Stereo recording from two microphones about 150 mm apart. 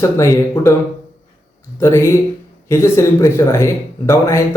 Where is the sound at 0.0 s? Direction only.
20° left (ahead or behind).